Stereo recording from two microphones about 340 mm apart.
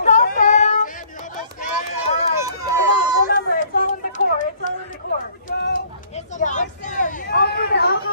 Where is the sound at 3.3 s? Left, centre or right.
Left.